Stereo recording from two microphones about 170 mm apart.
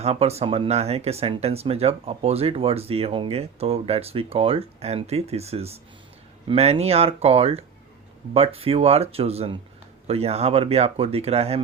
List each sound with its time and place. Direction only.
0.0 s speech: 35° right (ahead or behind)